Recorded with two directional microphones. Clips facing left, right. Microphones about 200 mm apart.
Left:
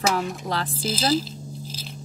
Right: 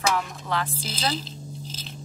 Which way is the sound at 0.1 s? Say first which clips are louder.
Left 2 dB; 35° left (ahead or behind).